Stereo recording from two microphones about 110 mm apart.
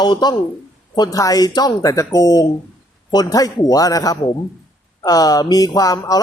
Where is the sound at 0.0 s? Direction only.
40° left (ahead or behind).